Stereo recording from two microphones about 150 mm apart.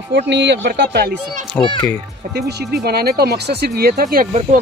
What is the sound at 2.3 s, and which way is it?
Speech, 90° right.